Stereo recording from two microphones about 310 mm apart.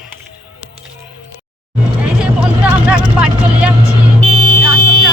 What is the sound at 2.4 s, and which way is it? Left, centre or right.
Speech, centre.